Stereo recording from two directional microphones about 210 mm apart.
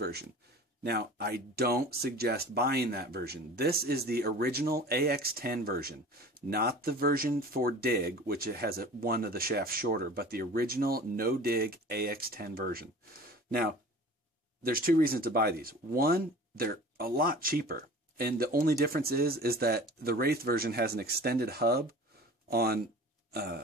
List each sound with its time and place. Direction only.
0.0 s speech: 50° right (ahead or behind)
14.6 s speech: 45° right (ahead or behind)